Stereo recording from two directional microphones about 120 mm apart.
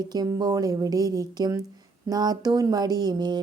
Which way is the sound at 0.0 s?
35° right (ahead or behind).